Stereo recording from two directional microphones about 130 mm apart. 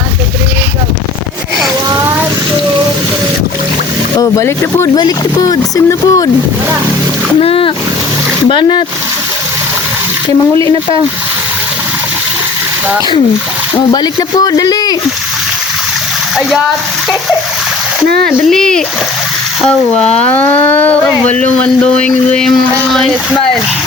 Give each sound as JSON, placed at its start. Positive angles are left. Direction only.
{"t": 4.2, "sound": "speech", "side_deg": 25}
{"t": 7.3, "sound": "speech", "side_deg": 45}
{"t": 13.7, "sound": "speech", "side_deg": 35}
{"t": 18.4, "sound": "speech", "side_deg": 5}
{"t": 20.1, "sound": "speech", "side_deg": 55}
{"t": 20.3, "sound": "speech", "side_deg": 15}